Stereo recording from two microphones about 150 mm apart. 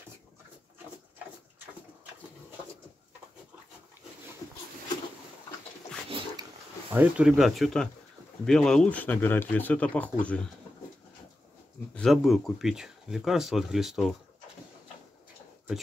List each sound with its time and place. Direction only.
6.0 s dog: 35° right (ahead or behind)
6.9 s speech: 10° right (ahead or behind); by 10.5 s 10° left (ahead or behind)
11.9 s speech: 5° left (ahead or behind)